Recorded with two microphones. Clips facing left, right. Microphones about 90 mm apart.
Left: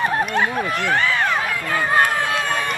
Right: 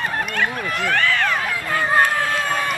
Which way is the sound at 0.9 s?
20° left (ahead or behind).